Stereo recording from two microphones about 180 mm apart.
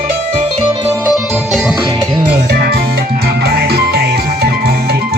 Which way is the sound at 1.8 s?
20° right (ahead or behind).